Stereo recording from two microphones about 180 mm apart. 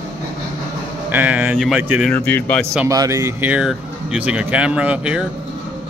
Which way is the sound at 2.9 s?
20° right (ahead or behind).